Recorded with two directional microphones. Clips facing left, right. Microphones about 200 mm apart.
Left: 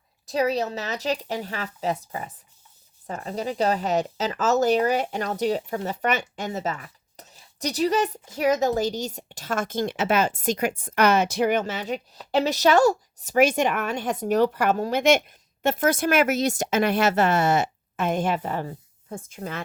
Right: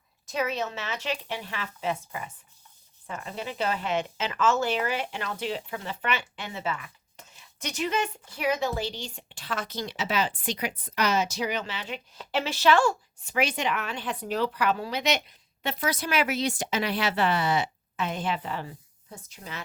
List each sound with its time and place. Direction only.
0.3 s a woman's voice: 35° left (ahead or behind)